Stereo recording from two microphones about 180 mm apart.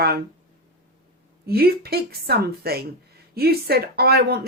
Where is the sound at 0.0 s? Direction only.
55° right (ahead or behind).